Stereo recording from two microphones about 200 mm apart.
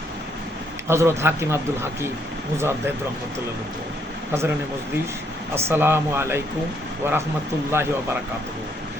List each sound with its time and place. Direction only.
0.9 s speech: 15° right (ahead or behind)
5.5 s speech: 10° right (ahead or behind)